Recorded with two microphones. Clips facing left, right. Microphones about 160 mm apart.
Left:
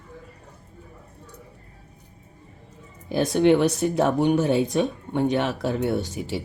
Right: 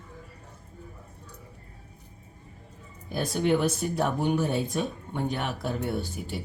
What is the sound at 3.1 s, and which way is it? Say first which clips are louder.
Speech: left 7 dB; 85° left.